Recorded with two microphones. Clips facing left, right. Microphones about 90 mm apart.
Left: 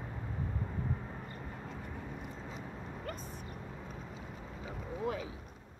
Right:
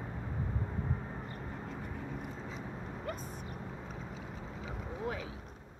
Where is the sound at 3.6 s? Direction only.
15° right (ahead or behind).